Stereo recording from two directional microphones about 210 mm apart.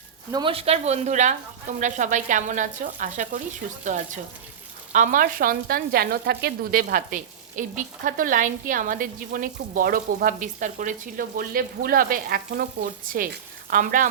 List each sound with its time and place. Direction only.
0.3 s a woman's voice: 20° right (ahead or behind); by 14.1 s 40° right (ahead or behind)